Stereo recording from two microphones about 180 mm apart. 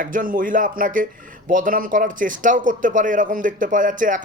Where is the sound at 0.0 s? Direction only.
50° right (ahead or behind).